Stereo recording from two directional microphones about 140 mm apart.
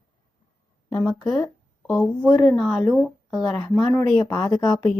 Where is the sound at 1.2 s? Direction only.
Centre (ahead or behind).